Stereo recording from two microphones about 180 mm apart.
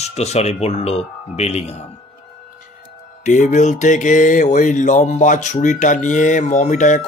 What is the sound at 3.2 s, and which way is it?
Speech, 45° left (ahead or behind).